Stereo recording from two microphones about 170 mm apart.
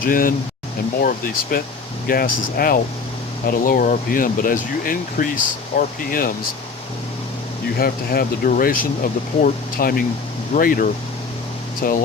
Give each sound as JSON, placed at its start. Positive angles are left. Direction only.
{"t": 0.0, "sound": "speech", "side_deg": 55}
{"t": 7.8, "sound": "speech", "side_deg": 60}